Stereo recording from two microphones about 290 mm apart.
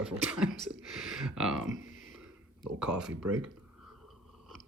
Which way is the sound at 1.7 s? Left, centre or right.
Left.